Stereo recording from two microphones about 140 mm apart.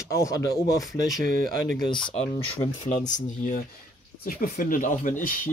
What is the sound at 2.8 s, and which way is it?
Speech, 60° left (ahead or behind).